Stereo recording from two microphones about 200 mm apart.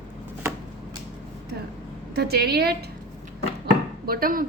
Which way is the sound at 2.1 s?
55° right (ahead or behind).